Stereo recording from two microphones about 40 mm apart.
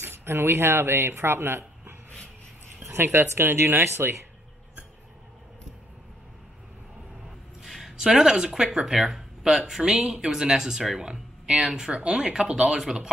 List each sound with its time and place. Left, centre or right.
0.0 s speech: right
7.6 s a sound: centre
8.0 s speech: centre
11.9 s speech: right